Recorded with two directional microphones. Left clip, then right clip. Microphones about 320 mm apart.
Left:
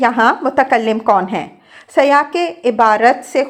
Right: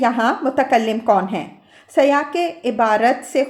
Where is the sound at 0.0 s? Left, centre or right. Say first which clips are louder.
Left 5 dB; centre.